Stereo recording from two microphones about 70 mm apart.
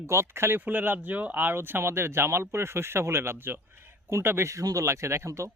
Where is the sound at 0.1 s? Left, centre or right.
Right.